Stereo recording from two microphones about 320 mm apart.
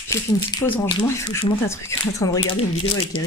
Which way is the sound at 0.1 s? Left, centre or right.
Centre.